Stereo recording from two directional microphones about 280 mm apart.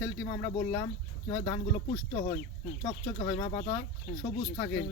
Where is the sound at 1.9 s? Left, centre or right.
Left.